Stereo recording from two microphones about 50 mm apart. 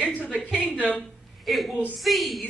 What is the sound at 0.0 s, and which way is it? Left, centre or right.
A man's voice, left.